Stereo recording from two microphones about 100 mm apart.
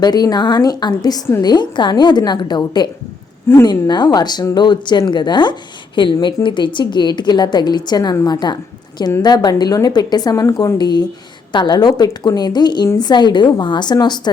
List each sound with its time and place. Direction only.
0.0 s a woman's voice: 40° left (ahead or behind)